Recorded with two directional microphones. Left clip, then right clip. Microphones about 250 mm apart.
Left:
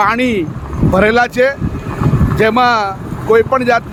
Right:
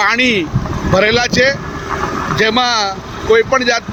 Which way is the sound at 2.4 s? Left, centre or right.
Left.